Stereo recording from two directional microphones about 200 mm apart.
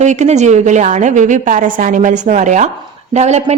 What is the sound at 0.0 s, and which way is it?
Speech, 35° right (ahead or behind).